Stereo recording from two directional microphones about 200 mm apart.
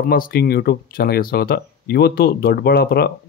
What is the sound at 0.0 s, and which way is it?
Speech, 45° left (ahead or behind).